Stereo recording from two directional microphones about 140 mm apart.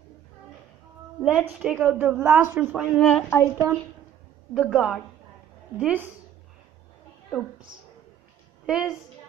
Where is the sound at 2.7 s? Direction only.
Centre (ahead or behind).